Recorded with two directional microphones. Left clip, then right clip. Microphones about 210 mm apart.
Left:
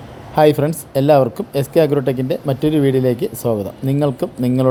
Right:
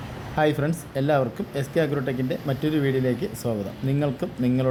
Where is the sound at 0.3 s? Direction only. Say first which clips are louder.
Left 10 dB; 25° left (ahead or behind).